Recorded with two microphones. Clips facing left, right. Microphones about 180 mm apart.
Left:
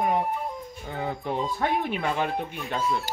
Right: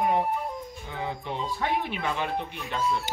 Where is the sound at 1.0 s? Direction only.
45° left (ahead or behind).